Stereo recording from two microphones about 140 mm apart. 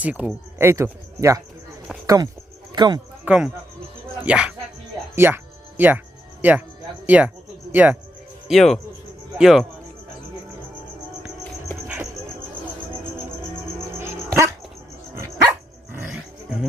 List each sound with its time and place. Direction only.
0.0 s speech: 10° right (ahead or behind); by 3.0 s 30° right (ahead or behind)
3.2 s speech: 5° right (ahead or behind)
5.1 s music: 15° right (ahead or behind)
6.4 s speech: 15° right (ahead or behind)
7.7 s speech: 10° right (ahead or behind)
8.4 s speech: centre (ahead or behind)
14.0 s dog: 20° right (ahead or behind)